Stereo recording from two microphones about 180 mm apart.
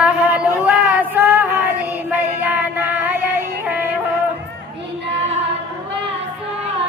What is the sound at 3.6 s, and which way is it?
Music, 10° right (ahead or behind).